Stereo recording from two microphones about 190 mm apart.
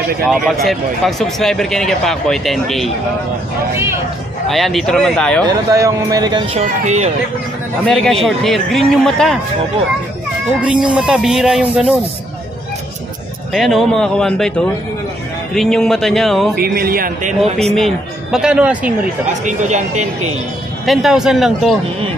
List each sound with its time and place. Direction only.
0.2 s a man's voice: centre (ahead or behind)
4.5 s a man's voice: centre (ahead or behind)
5.5 s speech: 20° right (ahead or behind); by 7.1 s 35° right (ahead or behind)
7.8 s a man's voice: 5° left (ahead or behind)
10.6 s a man's voice: 5° right (ahead or behind)
13.5 s a man's voice: centre (ahead or behind)
16.5 s a man's voice: 50° right (ahead or behind)
17.7 s a man's voice: centre (ahead or behind)
19.4 s speech: 40° right (ahead or behind)
20.8 s a man's voice: centre (ahead or behind)